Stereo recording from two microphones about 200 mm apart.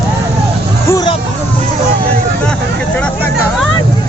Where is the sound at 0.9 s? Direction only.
20° left (ahead or behind).